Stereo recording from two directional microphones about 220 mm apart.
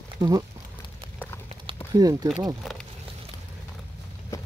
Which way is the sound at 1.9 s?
15° right (ahead or behind).